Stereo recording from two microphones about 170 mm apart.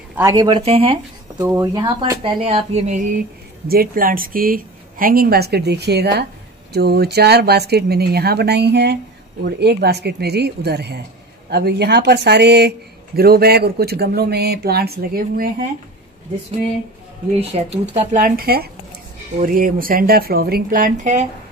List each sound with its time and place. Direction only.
0.1 s speech: 20° right (ahead or behind); by 0.9 s 35° right (ahead or behind)
1.4 s speech: 20° right (ahead or behind); by 3.1 s 40° right (ahead or behind)
3.6 s a woman's voice: 60° right (ahead or behind)
17.4 s a woman's voice: 35° right (ahead or behind)